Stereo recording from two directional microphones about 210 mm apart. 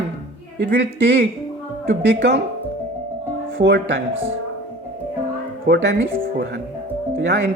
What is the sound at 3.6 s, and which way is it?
Speech, 55° right (ahead or behind).